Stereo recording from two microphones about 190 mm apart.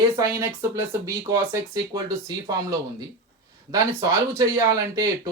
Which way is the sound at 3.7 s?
15° right (ahead or behind).